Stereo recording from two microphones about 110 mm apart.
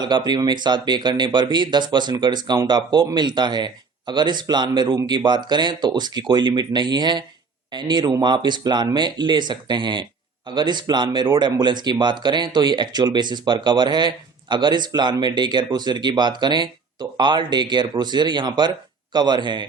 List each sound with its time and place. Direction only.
0.0 s speech: 40° right (ahead or behind)